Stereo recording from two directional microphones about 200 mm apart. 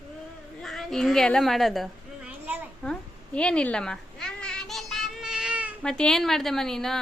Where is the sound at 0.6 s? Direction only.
Centre (ahead or behind).